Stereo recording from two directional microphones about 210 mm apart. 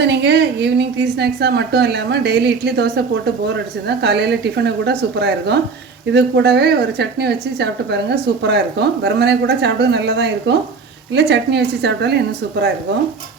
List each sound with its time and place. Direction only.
0.0 s a woman's voice: 55° right (ahead or behind)